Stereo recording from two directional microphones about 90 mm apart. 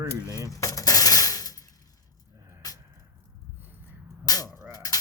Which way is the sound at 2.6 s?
45° left (ahead or behind).